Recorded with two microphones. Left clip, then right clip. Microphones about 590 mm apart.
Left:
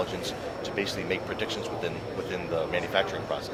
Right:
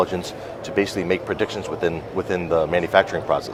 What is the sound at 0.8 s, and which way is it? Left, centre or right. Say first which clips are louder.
Speech: right 10 dB; right.